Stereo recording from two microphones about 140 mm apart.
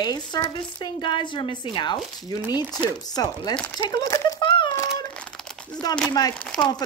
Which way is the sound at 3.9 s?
20° left (ahead or behind).